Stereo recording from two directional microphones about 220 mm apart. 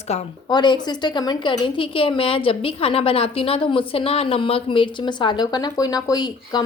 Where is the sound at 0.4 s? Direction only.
20° left (ahead or behind).